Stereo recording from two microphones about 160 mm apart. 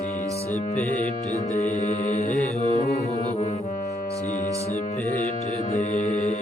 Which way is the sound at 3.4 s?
40° left (ahead or behind).